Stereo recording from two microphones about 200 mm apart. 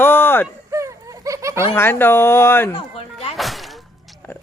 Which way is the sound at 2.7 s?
30° left (ahead or behind).